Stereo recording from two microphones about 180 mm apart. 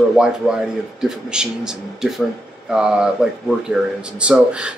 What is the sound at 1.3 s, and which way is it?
Speech, 5° right (ahead or behind).